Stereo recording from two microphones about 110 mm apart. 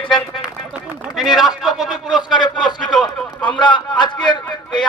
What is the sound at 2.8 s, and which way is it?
Speech, 45° left (ahead or behind).